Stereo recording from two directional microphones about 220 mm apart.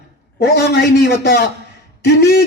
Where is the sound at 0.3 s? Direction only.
45° left (ahead or behind).